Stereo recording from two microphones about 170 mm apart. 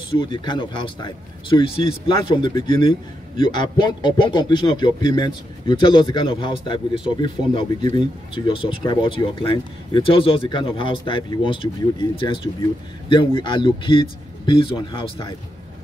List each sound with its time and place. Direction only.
0.1 s a man's voice: 30° left (ahead or behind)